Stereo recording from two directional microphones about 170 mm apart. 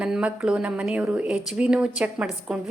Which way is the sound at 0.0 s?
5° right (ahead or behind).